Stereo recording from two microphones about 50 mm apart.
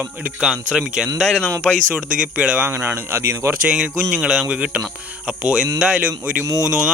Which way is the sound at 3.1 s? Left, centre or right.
Right.